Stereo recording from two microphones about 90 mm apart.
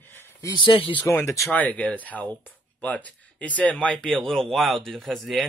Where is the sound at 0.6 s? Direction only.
70° left (ahead or behind).